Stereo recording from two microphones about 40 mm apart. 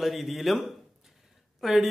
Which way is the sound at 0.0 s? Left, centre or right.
Centre.